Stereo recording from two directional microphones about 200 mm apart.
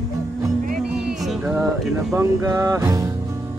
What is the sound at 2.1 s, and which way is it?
Music, 15° right (ahead or behind).